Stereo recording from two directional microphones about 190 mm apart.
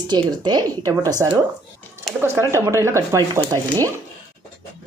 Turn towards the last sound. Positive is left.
turn(degrees=-15)  # may be behind; listen again after turning